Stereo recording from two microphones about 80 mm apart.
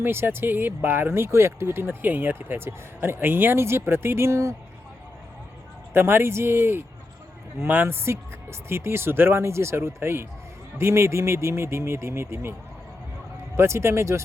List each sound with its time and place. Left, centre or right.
0.0 s speech: right
5.9 s speech: right
13.6 s speech: right